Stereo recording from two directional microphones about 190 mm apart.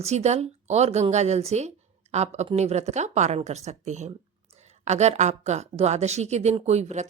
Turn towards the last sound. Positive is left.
turn(degrees=-35)  # may be behind; listen again after turning